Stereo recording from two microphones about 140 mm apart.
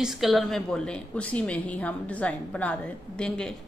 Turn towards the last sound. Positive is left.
turn(degrees=5)  # may be behind; listen again after turning